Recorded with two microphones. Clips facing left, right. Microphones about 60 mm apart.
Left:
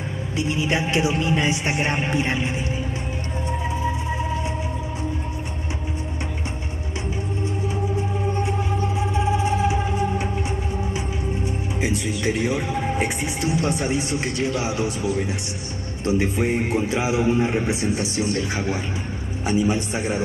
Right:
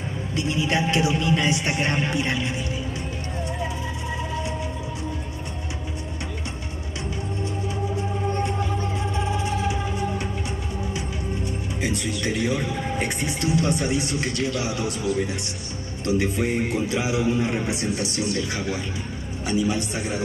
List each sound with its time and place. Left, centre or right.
0.4 s speech: left
8.3 s music: centre
11.4 s speech: centre